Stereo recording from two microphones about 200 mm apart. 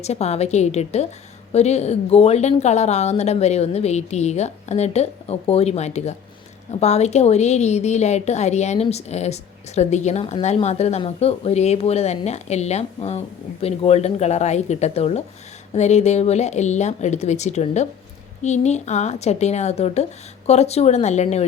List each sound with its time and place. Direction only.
0.0 s a woman's voice: 35° left (ahead or behind)